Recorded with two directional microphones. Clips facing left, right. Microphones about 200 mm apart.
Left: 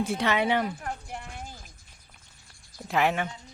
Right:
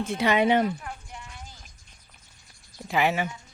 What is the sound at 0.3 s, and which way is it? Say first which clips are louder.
Speech: right 6 dB; 20° right (ahead or behind).